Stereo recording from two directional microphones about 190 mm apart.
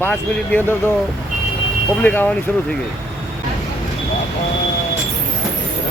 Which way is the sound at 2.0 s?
10° left (ahead or behind).